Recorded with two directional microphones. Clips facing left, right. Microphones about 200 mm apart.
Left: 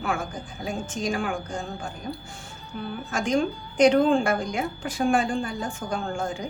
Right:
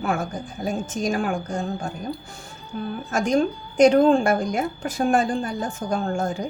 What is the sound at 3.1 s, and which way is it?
A woman's voice, 40° right (ahead or behind).